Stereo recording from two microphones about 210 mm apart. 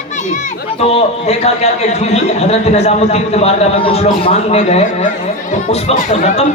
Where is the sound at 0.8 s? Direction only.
30° left (ahead or behind).